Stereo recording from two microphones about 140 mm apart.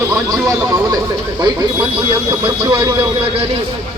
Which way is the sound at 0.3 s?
25° right (ahead or behind).